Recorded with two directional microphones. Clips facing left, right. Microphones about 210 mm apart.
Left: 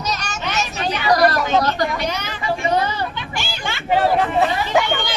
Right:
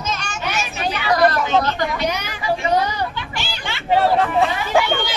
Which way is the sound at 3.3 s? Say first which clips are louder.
Left 2 dB; 50° left (ahead or behind).